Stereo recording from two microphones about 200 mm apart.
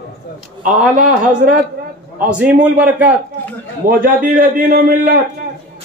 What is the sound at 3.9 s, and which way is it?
A man's voice, 45° right (ahead or behind).